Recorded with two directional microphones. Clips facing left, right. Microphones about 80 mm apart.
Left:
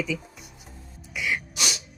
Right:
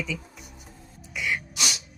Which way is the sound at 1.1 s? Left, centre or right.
Centre.